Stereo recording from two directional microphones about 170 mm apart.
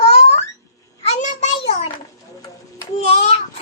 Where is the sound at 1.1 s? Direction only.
45° left (ahead or behind).